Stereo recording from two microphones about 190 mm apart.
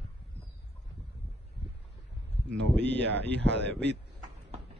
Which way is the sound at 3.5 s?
65° right (ahead or behind).